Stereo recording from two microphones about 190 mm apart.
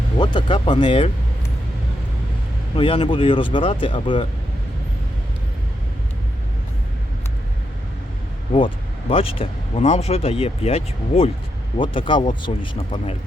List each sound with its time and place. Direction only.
0.2 s speech: 25° left (ahead or behind)
2.7 s speech: 25° left (ahead or behind)
8.5 s speech: 25° left (ahead or behind)